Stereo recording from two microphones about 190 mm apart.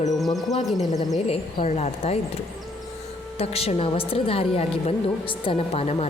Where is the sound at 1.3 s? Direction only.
30° left (ahead or behind).